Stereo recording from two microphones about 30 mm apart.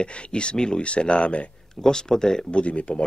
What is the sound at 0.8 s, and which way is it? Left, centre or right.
Speech, left.